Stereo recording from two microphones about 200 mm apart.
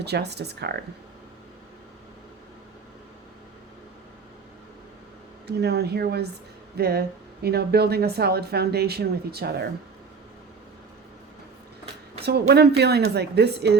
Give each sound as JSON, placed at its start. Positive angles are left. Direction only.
{"t": 0.0, "sound": "a woman's voice", "side_deg": -55}
{"t": 5.5, "sound": "speech", "side_deg": -55}
{"t": 12.2, "sound": "a woman's voice", "side_deg": -55}